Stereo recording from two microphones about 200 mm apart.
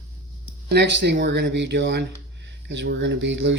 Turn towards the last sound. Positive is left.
turn(degrees=-65)  # may be behind; listen again after turning